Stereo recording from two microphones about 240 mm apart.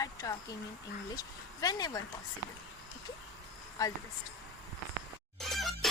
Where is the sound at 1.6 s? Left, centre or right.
Centre.